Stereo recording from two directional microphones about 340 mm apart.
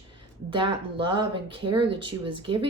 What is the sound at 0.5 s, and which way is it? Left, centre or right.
A woman's voice, centre.